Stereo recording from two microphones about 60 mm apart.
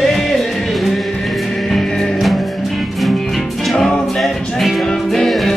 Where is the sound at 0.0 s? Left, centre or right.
Centre.